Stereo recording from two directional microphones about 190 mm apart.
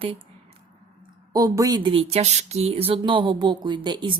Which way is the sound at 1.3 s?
20° right (ahead or behind).